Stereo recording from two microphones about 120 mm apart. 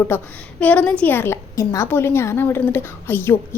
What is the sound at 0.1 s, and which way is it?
A woman's voice, 20° left (ahead or behind).